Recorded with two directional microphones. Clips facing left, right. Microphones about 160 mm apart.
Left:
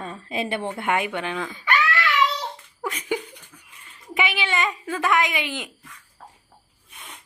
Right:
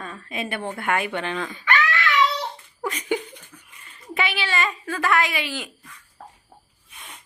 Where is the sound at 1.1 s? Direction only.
10° left (ahead or behind).